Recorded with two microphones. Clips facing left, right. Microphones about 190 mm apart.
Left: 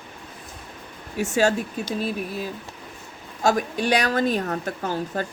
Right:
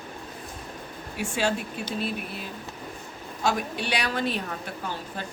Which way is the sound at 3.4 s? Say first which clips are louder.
Left 6 dB; 45° left (ahead or behind).